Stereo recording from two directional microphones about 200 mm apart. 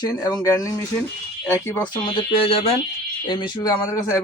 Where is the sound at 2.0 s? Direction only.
25° left (ahead or behind).